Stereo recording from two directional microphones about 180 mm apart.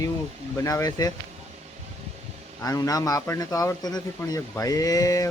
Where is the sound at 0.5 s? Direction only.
20° left (ahead or behind).